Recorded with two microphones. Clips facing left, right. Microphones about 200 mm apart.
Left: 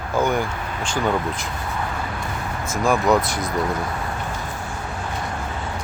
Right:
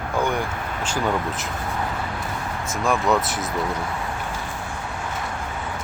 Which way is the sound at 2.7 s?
Centre (ahead or behind).